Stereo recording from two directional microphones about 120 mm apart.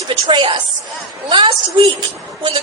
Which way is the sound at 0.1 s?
45° right (ahead or behind).